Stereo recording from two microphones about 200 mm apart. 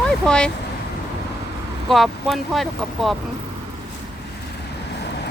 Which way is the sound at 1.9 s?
Centre (ahead or behind).